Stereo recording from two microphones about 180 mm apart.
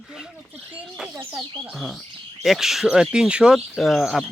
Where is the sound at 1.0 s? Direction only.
Centre (ahead or behind).